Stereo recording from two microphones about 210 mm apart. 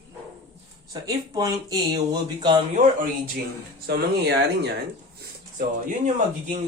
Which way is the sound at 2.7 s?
40° right (ahead or behind).